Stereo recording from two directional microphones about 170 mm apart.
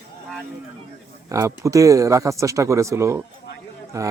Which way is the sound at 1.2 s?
20° right (ahead or behind).